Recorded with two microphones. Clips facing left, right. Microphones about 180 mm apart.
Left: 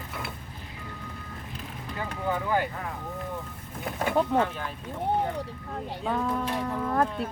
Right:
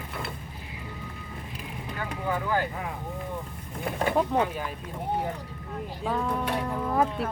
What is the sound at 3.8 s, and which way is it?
Speech, centre (ahead or behind).